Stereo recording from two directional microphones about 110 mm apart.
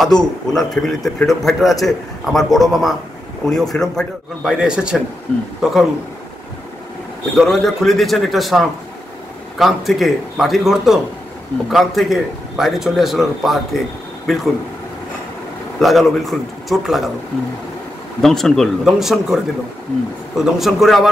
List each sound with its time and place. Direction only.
0.1 s a man's voice: 40° left (ahead or behind)
0.5 s a man's voice: 5° left (ahead or behind)
4.5 s a man's voice: 10° right (ahead or behind)
7.3 s a man's voice: centre (ahead or behind)
15.8 s a man's voice: centre (ahead or behind)
18.2 s a man's voice: 5° left (ahead or behind)
20.5 s a man's voice: centre (ahead or behind)